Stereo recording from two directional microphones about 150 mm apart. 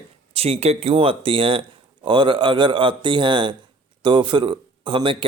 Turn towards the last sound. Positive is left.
turn(degrees=-35)  # may be behind; listen again after turning